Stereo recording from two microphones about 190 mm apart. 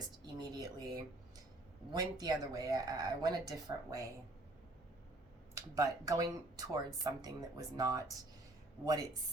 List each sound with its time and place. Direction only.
0.3 s speech: 20° right (ahead or behind)
5.5 s speech: 15° right (ahead or behind)